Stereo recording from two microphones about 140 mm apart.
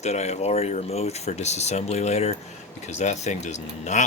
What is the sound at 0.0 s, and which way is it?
Speech, 55° left (ahead or behind).